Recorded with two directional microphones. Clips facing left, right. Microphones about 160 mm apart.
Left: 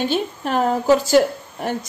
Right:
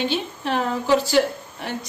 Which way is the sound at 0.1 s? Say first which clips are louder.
Left 3 dB; 45° left (ahead or behind).